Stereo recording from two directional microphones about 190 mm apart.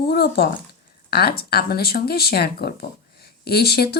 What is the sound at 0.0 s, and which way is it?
Speech, 55° left (ahead or behind).